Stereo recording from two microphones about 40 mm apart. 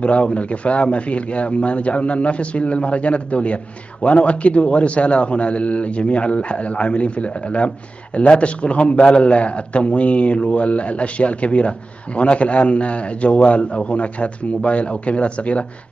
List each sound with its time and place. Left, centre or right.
0.0 s a man's voice: left